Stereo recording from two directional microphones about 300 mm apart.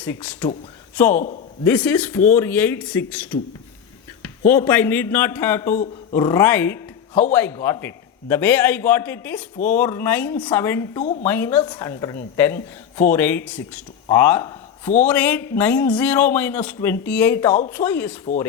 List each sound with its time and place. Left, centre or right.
0.0 s a man's voice: centre
1.1 s speech: left
1.6 s a man's voice: centre
11.0 s speech: left
11.3 s a woman's voice: centre